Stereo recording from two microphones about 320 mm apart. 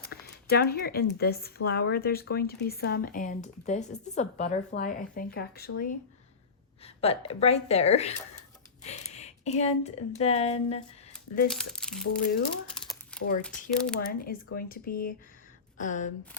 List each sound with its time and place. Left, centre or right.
0.0 s speech: left
11.4 s speech: centre
13.1 s a sound: centre
13.7 s speech: centre
14.0 s speech: left